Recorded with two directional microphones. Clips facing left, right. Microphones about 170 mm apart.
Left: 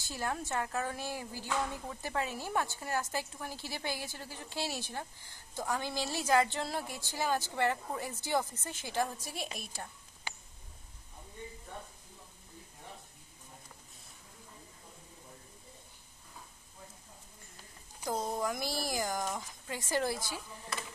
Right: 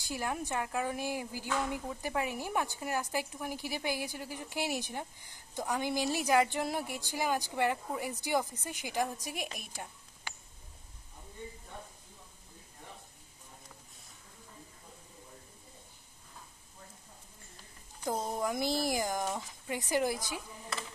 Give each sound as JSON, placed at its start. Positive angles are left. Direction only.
{"t": 0.0, "sound": "speech", "side_deg": -15}
{"t": 18.0, "sound": "speech", "side_deg": -20}